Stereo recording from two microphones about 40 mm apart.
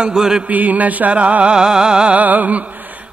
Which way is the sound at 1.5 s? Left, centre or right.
Centre.